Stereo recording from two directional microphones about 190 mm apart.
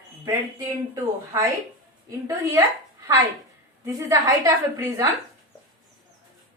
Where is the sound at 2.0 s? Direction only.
15° right (ahead or behind).